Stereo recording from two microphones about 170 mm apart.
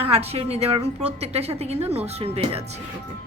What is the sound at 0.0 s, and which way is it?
A woman's voice, 35° right (ahead or behind).